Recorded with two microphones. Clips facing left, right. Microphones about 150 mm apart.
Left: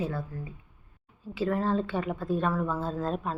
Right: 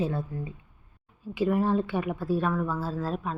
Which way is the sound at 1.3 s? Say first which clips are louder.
Right 3 dB; 15° right (ahead or behind).